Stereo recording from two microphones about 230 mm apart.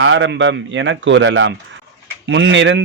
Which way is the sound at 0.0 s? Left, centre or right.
Right.